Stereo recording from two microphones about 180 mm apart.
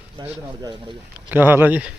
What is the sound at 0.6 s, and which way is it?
Speech, 25° right (ahead or behind).